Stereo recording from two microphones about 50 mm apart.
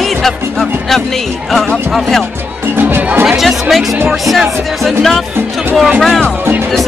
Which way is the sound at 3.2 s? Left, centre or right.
Centre.